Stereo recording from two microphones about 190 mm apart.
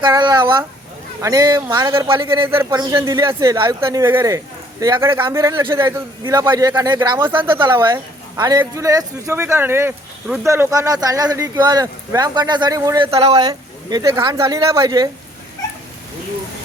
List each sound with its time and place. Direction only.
0.0 s speech: 25° right (ahead or behind)
13.1 s speech: 30° right (ahead or behind)